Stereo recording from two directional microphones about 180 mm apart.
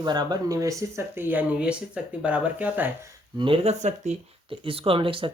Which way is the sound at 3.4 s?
30° right (ahead or behind).